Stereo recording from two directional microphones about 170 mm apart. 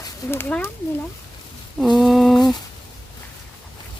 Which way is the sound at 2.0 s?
Centre (ahead or behind).